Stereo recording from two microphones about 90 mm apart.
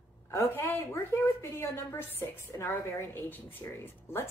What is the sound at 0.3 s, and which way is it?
Speech, 30° left (ahead or behind).